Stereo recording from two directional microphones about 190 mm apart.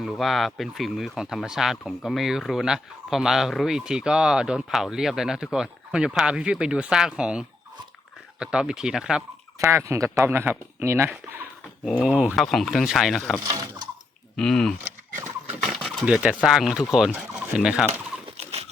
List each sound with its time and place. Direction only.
0.0 s speech: centre (ahead or behind)
13.4 s speech: 20° right (ahead or behind)
14.3 s speech: 5° left (ahead or behind)
16.0 s speech: 5° right (ahead or behind)
18.3 s a sound: 35° right (ahead or behind)